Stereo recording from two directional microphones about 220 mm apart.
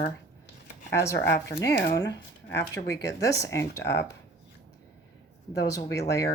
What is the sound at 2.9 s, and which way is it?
Speech, 15° left (ahead or behind).